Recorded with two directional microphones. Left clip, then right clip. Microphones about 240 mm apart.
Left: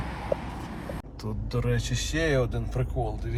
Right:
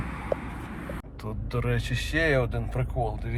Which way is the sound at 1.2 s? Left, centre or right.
Centre.